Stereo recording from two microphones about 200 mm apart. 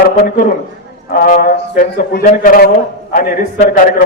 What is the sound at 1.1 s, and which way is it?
A man's voice, 45° left (ahead or behind).